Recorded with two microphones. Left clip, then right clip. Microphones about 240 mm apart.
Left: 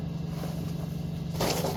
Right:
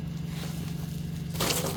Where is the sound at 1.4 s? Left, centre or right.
Right.